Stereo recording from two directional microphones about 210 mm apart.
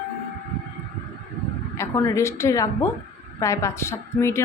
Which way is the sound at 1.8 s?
15° left (ahead or behind).